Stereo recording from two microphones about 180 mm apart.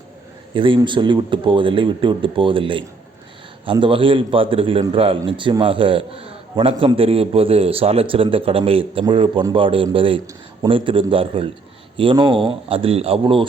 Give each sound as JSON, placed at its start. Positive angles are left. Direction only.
{"t": 0.5, "sound": "a man's voice", "side_deg": -30}